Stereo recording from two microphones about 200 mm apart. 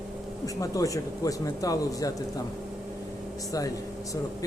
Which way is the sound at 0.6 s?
15° left (ahead or behind).